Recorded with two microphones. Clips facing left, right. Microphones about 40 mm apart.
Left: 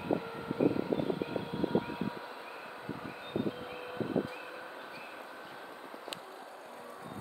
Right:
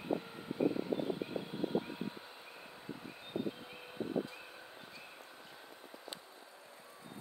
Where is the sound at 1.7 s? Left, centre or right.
Left.